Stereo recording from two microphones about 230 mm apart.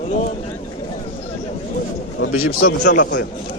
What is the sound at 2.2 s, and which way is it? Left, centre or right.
Speech, left.